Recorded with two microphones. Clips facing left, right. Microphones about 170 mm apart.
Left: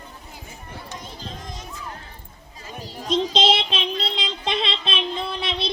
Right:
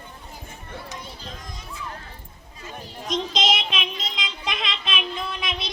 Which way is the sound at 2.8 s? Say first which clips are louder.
Left 5 dB; 35° left (ahead or behind).